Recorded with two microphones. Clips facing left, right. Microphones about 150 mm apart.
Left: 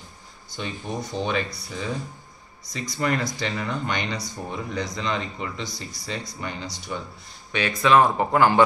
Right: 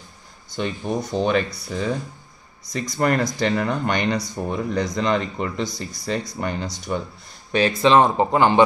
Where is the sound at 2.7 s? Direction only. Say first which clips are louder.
Right 5 dB; 50° right (ahead or behind).